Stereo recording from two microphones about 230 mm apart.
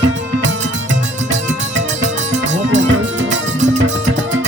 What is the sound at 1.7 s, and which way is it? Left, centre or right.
Music, right.